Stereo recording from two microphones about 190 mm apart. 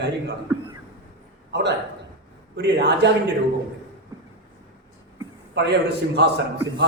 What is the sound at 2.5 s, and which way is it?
Speech, 65° right (ahead or behind).